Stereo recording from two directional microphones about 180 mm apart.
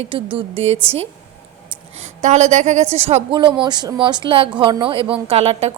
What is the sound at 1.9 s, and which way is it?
A woman's voice, 40° right (ahead or behind).